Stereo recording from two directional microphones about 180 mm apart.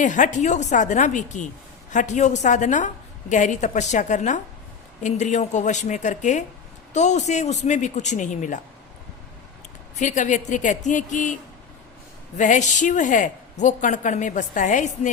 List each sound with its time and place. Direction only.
0.0 s a woman's voice: 45° left (ahead or behind)
10.0 s speech: 40° left (ahead or behind)
12.4 s speech: 45° left (ahead or behind)